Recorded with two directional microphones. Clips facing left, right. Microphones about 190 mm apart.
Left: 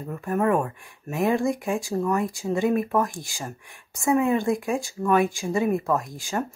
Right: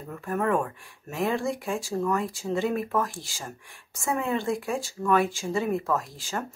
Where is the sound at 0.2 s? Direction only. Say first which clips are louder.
Left 3 dB; 15° left (ahead or behind).